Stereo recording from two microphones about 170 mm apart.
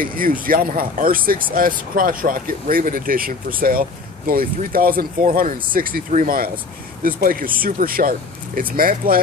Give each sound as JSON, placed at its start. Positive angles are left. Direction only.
{"t": 0.0, "sound": "speech", "side_deg": -55}